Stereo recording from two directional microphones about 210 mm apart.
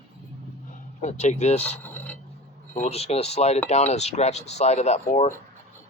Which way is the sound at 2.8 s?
30° left (ahead or behind).